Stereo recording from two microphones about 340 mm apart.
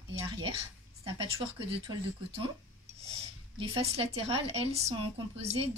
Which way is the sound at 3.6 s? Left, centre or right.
Centre.